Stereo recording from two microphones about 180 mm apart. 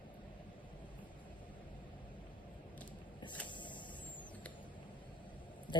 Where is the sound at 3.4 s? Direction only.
25° left (ahead or behind).